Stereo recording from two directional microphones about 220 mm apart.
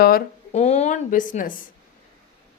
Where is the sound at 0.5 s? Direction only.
30° left (ahead or behind).